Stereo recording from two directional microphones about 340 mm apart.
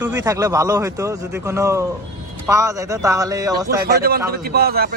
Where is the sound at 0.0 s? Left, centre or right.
Centre.